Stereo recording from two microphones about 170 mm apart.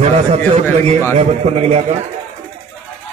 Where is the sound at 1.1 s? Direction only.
40° right (ahead or behind).